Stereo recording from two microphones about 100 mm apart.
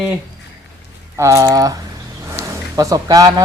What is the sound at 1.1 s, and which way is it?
Speech, 30° right (ahead or behind).